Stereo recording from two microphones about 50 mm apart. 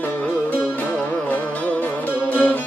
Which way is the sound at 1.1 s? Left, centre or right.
Left.